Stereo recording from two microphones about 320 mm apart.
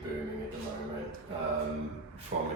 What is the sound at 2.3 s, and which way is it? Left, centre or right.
Speech, right.